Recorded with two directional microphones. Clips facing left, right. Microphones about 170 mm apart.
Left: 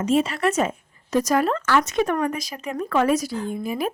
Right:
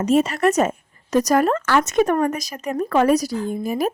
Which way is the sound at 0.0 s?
45° right (ahead or behind).